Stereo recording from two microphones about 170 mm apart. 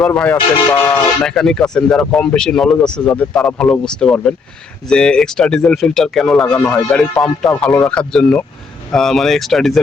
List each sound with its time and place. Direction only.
0.0 s speech: 5° left (ahead or behind)
0.7 s speech: 15° left (ahead or behind)
1.2 s speech: centre (ahead or behind)